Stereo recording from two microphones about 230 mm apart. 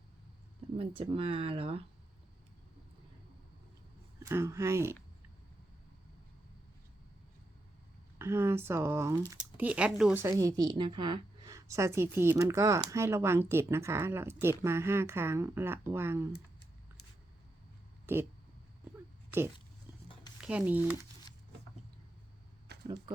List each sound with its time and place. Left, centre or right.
0.8 s speech: right
4.2 s speech: centre
8.2 s speech: centre
18.0 s speech: centre
20.4 s speech: centre
22.7 s a sound: right